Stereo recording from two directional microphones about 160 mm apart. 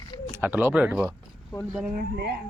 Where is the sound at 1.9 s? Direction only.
75° right (ahead or behind).